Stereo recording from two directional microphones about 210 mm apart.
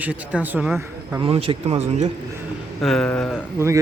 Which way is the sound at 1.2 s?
25° right (ahead or behind).